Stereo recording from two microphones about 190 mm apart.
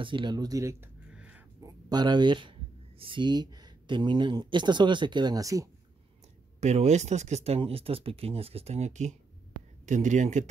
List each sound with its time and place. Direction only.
0.0 s speech: 25° right (ahead or behind)
1.1 s a sound: 5° right (ahead or behind)
1.6 s speech: 20° right (ahead or behind)
6.6 s speech: 35° right (ahead or behind)